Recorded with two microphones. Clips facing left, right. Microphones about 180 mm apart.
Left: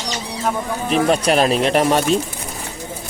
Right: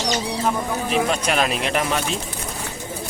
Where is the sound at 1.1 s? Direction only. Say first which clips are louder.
Left 6 dB; 35° left (ahead or behind).